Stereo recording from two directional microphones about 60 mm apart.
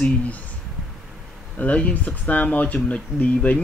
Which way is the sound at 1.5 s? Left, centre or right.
Left.